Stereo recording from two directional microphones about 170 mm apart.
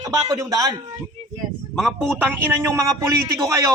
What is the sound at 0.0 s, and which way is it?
Speech, 25° right (ahead or behind).